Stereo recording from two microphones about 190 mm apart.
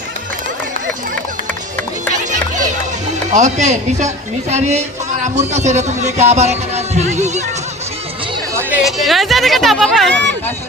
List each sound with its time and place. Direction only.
3.2 s speech: 40° right (ahead or behind)
8.5 s speech: 5° right (ahead or behind)